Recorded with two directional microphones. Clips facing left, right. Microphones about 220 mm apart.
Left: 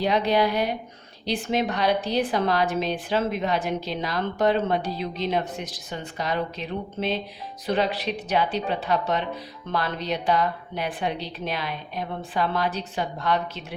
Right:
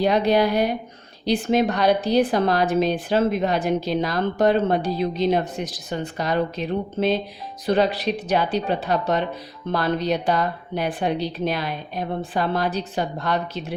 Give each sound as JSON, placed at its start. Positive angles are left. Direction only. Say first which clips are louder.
{"t": 0.0, "sound": "a woman's voice", "louder": "right 3 dB", "side_deg": -45}